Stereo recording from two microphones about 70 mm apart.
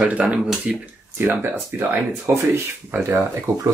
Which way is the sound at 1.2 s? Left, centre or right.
Right.